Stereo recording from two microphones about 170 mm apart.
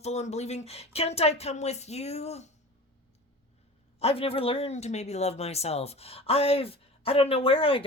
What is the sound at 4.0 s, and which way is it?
Speech, 35° left (ahead or behind).